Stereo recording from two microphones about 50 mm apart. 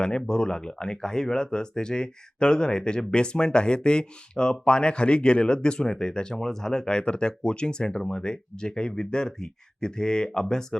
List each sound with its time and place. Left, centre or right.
0.2 s speech: centre